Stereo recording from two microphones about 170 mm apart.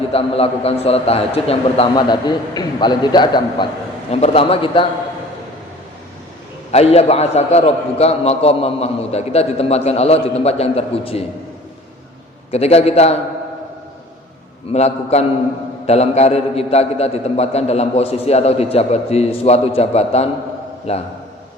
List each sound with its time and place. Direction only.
0.1 s a man's voice: 35° left (ahead or behind)
6.7 s a man's voice: 40° left (ahead or behind)
12.5 s a man's voice: 35° left (ahead or behind)
14.7 s a man's voice: 40° left (ahead or behind)